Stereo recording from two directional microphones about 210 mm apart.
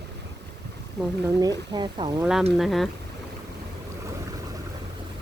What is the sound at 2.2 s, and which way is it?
Speech, centre (ahead or behind).